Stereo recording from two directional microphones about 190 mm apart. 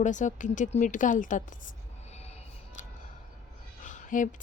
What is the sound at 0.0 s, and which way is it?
A woman's voice, 40° left (ahead or behind).